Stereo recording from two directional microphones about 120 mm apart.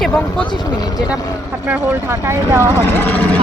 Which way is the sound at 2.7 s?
20° left (ahead or behind).